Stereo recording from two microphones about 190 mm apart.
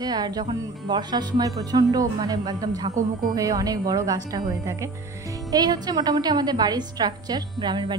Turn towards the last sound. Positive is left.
turn(degrees=-25)  # may be behind; listen again after turning